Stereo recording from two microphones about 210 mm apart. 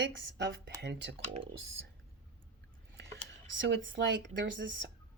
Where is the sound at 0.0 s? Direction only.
60° right (ahead or behind).